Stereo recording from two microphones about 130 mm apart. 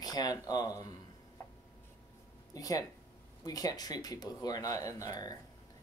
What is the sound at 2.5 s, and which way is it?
Speech, 25° left (ahead or behind).